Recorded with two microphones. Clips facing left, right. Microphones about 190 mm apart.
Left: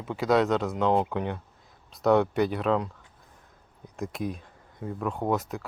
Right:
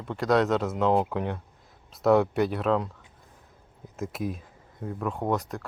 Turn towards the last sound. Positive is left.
turn(degrees=0)  # may be behind; listen again after turning